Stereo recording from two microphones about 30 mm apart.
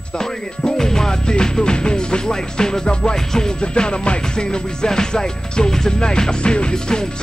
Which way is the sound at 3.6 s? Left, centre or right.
Left.